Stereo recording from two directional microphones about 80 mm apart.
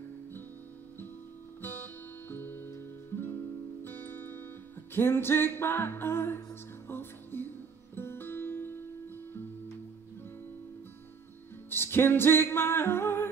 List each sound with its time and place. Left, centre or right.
1.6 s guitar: left
3.8 s music: left
11.7 s music: left